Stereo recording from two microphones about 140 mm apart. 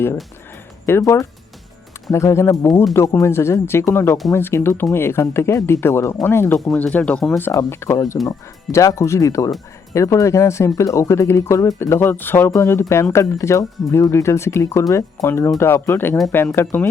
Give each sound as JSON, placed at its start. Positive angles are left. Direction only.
{"t": 0.9, "sound": "speech", "side_deg": 20}